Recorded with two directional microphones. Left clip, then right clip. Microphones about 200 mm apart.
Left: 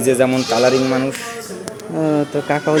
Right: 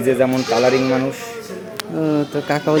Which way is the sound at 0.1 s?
10° left (ahead or behind).